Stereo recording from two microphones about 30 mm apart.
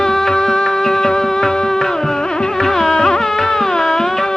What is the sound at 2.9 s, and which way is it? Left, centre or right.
Music, centre.